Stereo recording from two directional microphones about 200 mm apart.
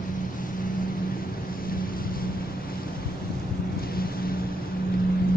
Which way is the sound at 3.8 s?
50° left (ahead or behind).